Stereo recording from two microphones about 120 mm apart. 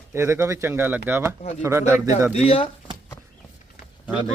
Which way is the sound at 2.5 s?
50° left (ahead or behind).